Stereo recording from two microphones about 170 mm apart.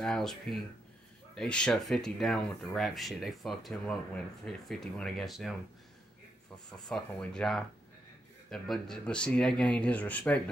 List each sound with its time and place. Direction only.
0.0 s speech: centre (ahead or behind)
6.7 s speech: 5° left (ahead or behind)